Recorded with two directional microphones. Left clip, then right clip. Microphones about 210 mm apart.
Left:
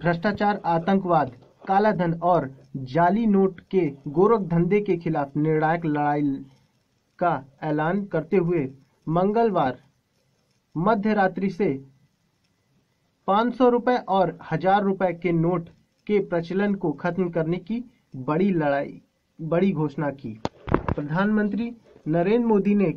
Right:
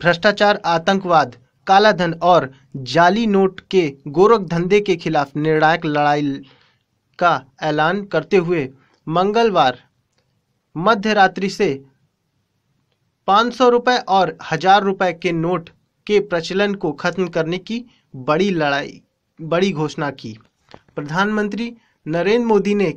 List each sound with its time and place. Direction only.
0.0 s speech: 25° right (ahead or behind)
13.2 s speech: 20° right (ahead or behind)